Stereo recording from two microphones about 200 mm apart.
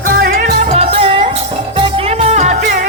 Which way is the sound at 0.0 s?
45° right (ahead or behind).